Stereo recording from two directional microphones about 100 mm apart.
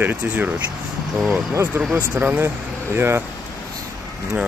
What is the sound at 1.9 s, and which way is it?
Speech, 20° right (ahead or behind).